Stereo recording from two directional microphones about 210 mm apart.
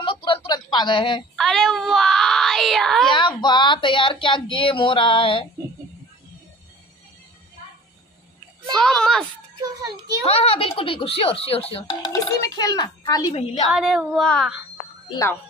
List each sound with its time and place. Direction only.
0.0 s speech: 25° left (ahead or behind)
1.3 s child singing: centre (ahead or behind)
3.1 s speech: 20° left (ahead or behind)
8.7 s child singing: centre (ahead or behind)
9.6 s a child's voice: 15° right (ahead or behind)
10.2 s speech: 25° left (ahead or behind)
13.3 s speech: 30° left (ahead or behind)
13.7 s child singing: centre (ahead or behind)
15.0 s a child's voice: 15° left (ahead or behind)